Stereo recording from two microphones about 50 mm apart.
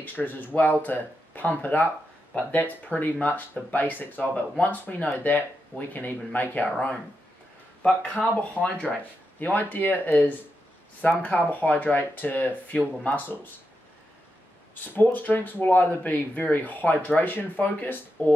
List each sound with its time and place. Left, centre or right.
0.0 s speech: left
7.8 s speech: left
15.0 s speech: left